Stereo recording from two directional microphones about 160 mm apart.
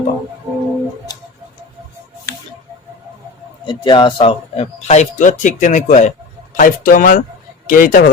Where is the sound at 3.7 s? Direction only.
30° left (ahead or behind); by 8.1 s 60° left (ahead or behind).